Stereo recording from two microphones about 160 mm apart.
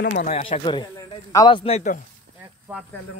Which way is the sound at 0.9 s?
20° left (ahead or behind).